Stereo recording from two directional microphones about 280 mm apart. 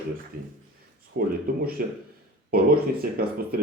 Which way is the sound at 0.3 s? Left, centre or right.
Right.